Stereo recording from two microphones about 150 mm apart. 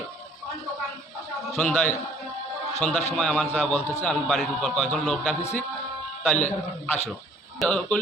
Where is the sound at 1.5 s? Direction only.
5° left (ahead or behind).